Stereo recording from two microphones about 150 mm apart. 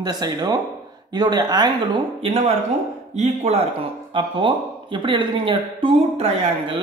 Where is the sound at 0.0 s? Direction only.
25° right (ahead or behind).